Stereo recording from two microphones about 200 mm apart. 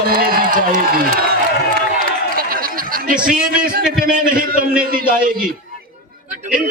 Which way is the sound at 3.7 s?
45° right (ahead or behind).